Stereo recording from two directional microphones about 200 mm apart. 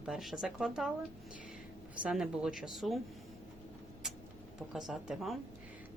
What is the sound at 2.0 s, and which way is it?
Speech, 5° right (ahead or behind).